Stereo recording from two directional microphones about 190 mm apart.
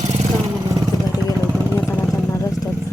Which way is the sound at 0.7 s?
15° right (ahead or behind).